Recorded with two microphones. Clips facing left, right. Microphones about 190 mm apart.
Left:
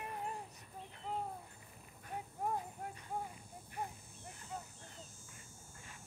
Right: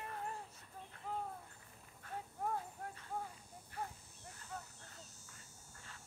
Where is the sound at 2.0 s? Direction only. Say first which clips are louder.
Left 2 dB; 15° left (ahead or behind).